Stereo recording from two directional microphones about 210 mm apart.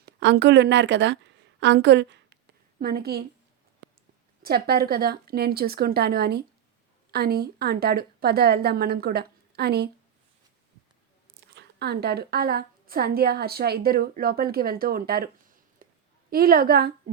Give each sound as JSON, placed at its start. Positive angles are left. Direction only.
{"t": 0.0, "sound": "a woman's voice", "side_deg": -55}
{"t": 4.4, "sound": "a woman's voice", "side_deg": -45}
{"t": 11.5, "sound": "a woman's voice", "side_deg": -50}
{"t": 15.8, "sound": "a sound", "side_deg": -40}
{"t": 16.3, "sound": "a woman's voice", "side_deg": -45}